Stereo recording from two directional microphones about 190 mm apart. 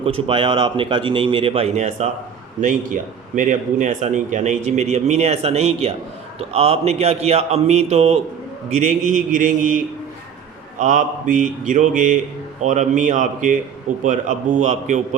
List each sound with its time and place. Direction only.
0.0 s a man's voice: 30° right (ahead or behind)